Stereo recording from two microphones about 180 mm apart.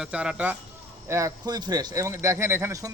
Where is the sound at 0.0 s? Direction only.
5° right (ahead or behind).